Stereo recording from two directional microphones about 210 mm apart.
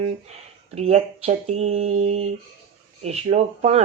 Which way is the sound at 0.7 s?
30° right (ahead or behind).